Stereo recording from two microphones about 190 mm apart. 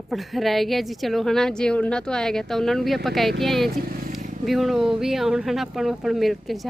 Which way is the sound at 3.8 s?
50° right (ahead or behind).